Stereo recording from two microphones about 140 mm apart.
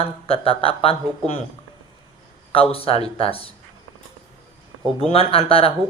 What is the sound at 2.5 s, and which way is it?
Speech, 40° left (ahead or behind).